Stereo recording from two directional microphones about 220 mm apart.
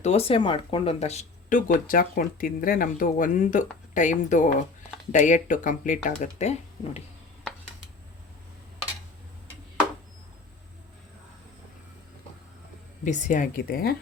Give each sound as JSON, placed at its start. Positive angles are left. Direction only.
{"t": 0.0, "sound": "speech", "side_deg": 30}
{"t": 13.1, "sound": "speech", "side_deg": 35}